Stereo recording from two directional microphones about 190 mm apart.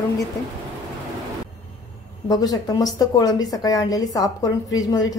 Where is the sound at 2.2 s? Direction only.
20° left (ahead or behind).